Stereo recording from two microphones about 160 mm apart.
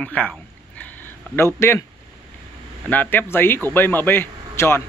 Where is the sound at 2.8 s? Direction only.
10° left (ahead or behind).